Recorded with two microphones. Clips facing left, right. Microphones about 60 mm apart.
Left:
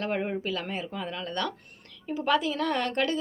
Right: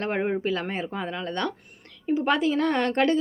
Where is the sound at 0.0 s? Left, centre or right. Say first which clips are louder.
Right 4 dB; right.